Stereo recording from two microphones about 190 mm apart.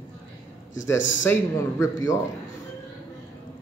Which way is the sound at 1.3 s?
15° left (ahead or behind).